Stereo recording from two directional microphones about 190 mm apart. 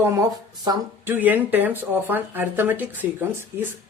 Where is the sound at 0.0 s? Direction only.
15° right (ahead or behind).